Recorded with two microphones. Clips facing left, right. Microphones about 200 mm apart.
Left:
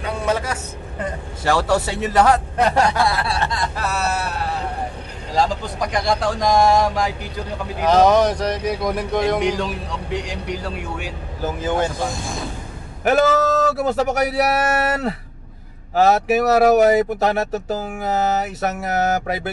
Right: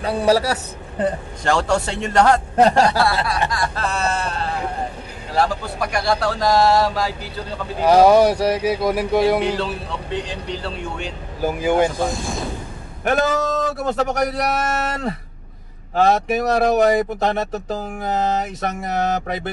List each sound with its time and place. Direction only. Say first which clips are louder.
0.0 s a man's voice: right 5 dB; 35° right (ahead or behind)
1.4 s a man's voice: left 1 dB; 5° left (ahead or behind)
2.5 s speech: right 3 dB; 35° right (ahead or behind)
3.5 s speech: right 1 dB; 20° left (ahead or behind)
3.8 s speech: even; 5° left (ahead or behind)
7.8 s speech: right 2 dB; 10° right (ahead or behind)
9.4 s speech: left 1 dB; 15° left (ahead or behind)
11.4 s speech: right 4 dB; 10° right (ahead or behind)
13.0 s speech: left 3 dB; 5° left (ahead or behind)